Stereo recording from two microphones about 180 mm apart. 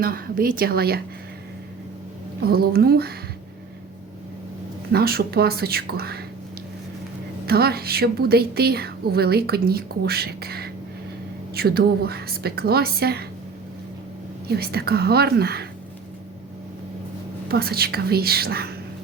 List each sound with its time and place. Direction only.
0.0 s a woman's voice: 55° right (ahead or behind)
2.5 s a woman's voice: 60° right (ahead or behind)
4.9 s a woman's voice: 60° right (ahead or behind)
7.4 s a woman's voice: 60° right (ahead or behind)
14.4 s a woman's voice: 60° right (ahead or behind)
17.5 s a woman's voice: 60° right (ahead or behind)